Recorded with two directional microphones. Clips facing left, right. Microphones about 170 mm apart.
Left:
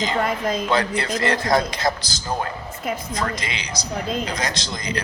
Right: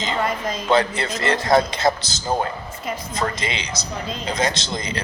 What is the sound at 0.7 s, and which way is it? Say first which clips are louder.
A man's voice: right 7 dB; 25° right (ahead or behind).